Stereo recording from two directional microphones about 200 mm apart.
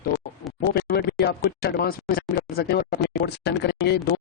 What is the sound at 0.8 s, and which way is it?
A man's voice, 50° left (ahead or behind).